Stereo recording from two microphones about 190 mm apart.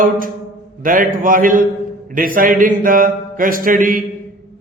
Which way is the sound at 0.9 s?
45° right (ahead or behind).